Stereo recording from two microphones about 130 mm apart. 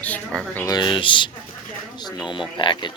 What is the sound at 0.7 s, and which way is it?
Speech, 35° left (ahead or behind).